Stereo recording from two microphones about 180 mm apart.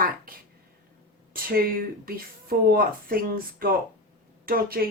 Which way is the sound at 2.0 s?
55° right (ahead or behind).